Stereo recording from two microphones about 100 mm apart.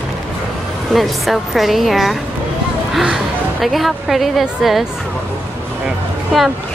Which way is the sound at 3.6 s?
Centre (ahead or behind).